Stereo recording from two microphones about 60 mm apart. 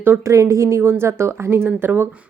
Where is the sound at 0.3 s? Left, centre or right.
Right.